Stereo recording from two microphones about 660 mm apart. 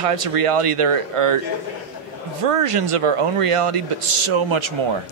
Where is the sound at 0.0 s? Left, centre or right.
Right.